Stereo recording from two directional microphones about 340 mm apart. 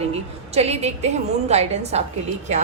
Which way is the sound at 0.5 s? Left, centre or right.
Centre.